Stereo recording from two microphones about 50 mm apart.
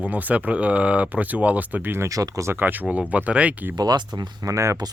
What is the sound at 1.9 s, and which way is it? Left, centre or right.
Speech, right.